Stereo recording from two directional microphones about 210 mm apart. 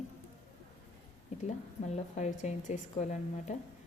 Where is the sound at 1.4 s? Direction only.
35° left (ahead or behind).